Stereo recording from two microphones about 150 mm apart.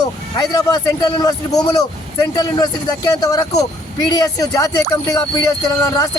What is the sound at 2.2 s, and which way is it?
Speech, 25° left (ahead or behind).